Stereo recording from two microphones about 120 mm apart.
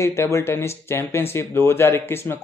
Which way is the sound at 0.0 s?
20° left (ahead or behind).